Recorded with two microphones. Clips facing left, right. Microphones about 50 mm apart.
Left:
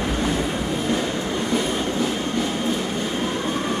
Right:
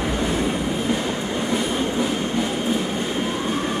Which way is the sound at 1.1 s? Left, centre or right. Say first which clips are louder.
Even; centre.